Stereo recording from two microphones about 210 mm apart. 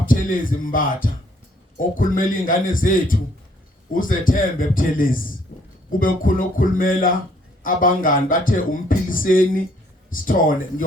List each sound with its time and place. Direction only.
0.0 s speech: 40° left (ahead or behind)
5.5 s a sound: 45° left (ahead or behind)
6.0 s speech: 40° left (ahead or behind)